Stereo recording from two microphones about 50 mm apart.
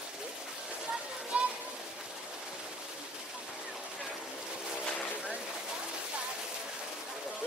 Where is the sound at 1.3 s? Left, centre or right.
Right.